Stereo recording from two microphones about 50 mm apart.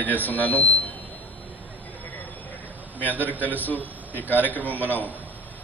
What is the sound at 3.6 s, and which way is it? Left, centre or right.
A man's voice, left.